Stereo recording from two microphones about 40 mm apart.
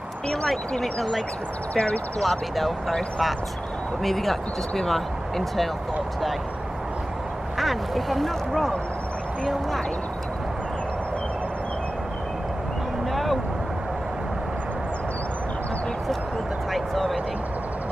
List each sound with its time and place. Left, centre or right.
0.3 s speech: centre
1.7 s speech: left
2.2 s speech: centre
4.0 s speech: centre
7.5 s speech: centre
13.1 s vehicle: centre
16.7 s a sound: centre